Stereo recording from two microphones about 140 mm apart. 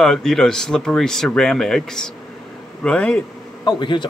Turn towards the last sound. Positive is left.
turn(degrees=35)  # may be behind; listen again after turning